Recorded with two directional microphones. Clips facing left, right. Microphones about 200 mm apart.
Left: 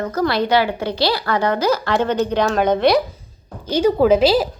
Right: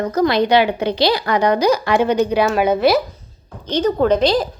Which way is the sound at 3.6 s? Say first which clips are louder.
Left 2 dB; 10° left (ahead or behind).